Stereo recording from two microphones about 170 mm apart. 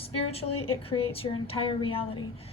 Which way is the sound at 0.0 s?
35° left (ahead or behind).